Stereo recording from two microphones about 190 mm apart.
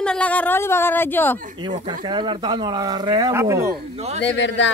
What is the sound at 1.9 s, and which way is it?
Speech, 25° right (ahead or behind).